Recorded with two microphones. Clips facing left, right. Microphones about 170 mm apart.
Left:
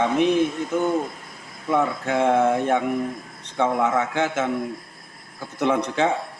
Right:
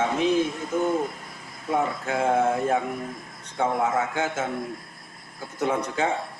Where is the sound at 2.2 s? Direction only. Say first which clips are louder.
Left 3 dB; 80° left.